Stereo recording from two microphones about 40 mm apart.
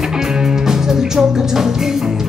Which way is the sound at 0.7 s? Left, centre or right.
Centre.